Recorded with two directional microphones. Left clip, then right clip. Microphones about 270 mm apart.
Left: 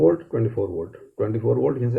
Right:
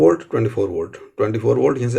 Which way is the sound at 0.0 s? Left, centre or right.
Right.